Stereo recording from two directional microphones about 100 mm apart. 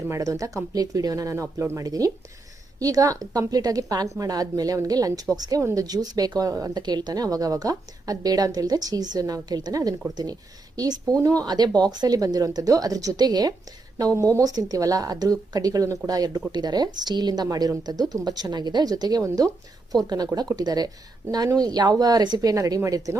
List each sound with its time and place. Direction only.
0.1 s speech: 35° right (ahead or behind)